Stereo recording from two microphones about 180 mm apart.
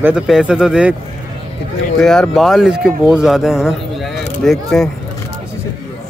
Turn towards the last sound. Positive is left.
turn(degrees=0)  # may be behind; listen again after turning